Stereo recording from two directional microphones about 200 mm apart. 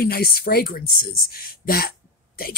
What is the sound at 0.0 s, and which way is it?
Speech, 50° left (ahead or behind).